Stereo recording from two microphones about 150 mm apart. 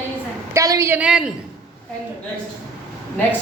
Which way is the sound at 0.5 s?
20° right (ahead or behind).